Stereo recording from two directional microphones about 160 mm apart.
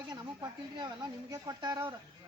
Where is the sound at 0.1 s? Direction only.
25° right (ahead or behind).